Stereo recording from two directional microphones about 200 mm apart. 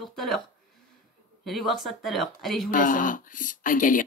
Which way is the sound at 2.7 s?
40° left (ahead or behind).